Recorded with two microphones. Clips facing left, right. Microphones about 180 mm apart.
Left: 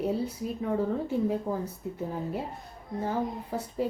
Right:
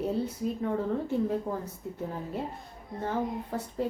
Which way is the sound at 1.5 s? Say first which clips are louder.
Left 2 dB; 5° left (ahead or behind).